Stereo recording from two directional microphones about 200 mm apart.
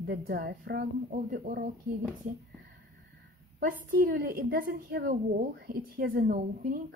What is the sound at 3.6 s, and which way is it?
A woman's voice, 45° right (ahead or behind).